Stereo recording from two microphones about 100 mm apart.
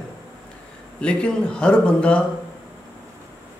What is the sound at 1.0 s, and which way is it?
A man's voice, 10° left (ahead or behind).